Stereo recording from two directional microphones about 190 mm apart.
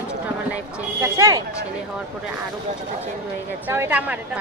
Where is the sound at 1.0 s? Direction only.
15° right (ahead or behind).